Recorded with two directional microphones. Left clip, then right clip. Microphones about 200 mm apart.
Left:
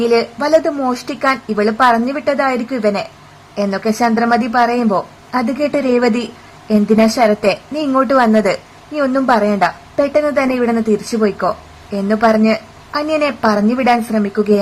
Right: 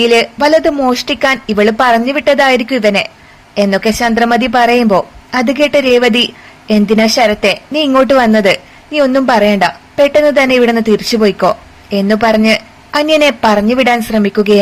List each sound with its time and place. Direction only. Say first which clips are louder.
0.0 s a woman's voice: right 5 dB; 15° right (ahead or behind)